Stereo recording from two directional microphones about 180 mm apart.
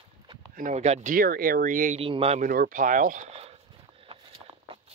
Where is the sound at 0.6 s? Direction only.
40° right (ahead or behind).